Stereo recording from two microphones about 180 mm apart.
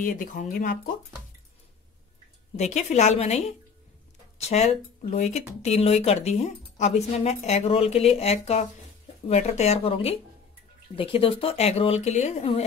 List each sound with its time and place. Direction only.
0.0 s speech: 50° left (ahead or behind)
2.5 s speech: 40° left (ahead or behind)